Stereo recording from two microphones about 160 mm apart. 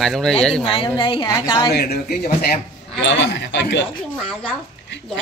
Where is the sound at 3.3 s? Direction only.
90° left.